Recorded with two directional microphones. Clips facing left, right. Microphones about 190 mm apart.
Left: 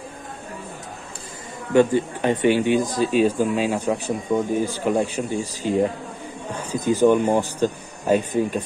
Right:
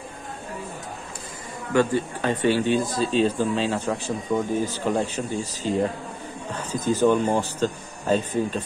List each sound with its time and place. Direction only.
1.7 s speech: 20° left (ahead or behind)